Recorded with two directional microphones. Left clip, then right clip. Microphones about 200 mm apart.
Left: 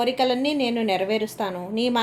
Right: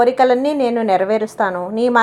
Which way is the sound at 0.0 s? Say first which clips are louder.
Right 9 dB; 20° right (ahead or behind).